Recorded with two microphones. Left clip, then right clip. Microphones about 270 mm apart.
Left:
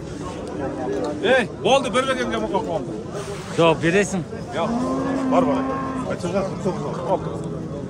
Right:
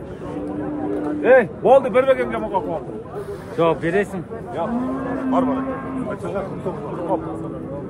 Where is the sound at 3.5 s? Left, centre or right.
Left.